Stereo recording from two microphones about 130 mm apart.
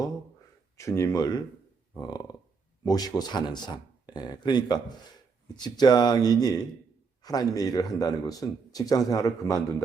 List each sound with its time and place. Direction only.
0.8 s speech: 25° left (ahead or behind)
2.8 s speech: 30° left (ahead or behind)